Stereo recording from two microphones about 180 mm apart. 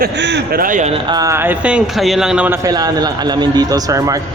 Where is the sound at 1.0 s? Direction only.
20° right (ahead or behind).